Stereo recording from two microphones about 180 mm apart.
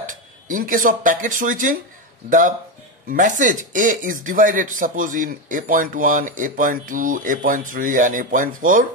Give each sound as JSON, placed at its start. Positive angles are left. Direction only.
{"t": 0.0, "sound": "speech", "side_deg": -50}